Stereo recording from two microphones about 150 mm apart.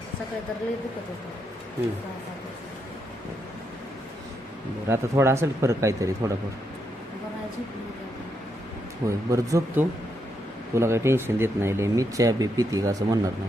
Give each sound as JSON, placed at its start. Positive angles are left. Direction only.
{"t": 4.9, "sound": "speech", "side_deg": -20}
{"t": 9.0, "sound": "speech", "side_deg": -20}